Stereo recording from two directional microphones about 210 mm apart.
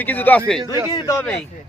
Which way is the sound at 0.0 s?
10° left (ahead or behind).